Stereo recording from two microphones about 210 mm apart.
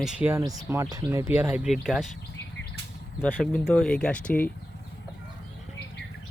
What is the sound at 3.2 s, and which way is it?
Speech, 5° left (ahead or behind).